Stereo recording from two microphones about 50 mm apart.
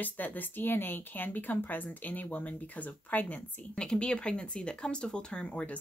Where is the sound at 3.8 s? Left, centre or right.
Centre.